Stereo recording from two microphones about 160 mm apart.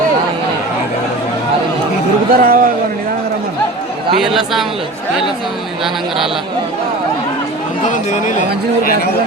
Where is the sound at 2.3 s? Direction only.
70° right (ahead or behind).